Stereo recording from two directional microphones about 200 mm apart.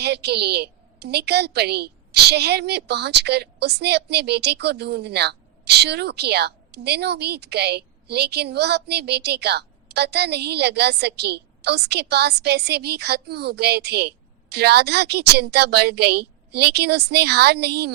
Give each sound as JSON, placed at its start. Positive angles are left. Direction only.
{"t": 0.0, "sound": "a woman's voice", "side_deg": -55}